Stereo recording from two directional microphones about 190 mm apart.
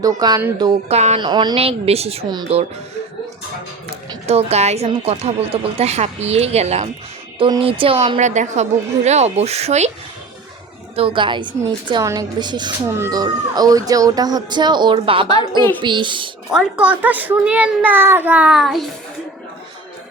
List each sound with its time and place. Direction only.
0.0 s a woman's voice: 20° right (ahead or behind)
0.9 s speech: 35° right (ahead or behind)
4.3 s speech: 35° right (ahead or behind)
10.9 s a woman's voice: 25° right (ahead or behind)
16.5 s a child's voice: 5° right (ahead or behind)